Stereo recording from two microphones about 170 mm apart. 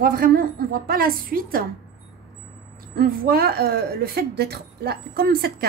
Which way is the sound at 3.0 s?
60° right (ahead or behind).